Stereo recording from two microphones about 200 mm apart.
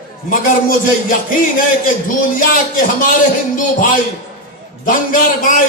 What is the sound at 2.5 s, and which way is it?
Speech, 40° left (ahead or behind).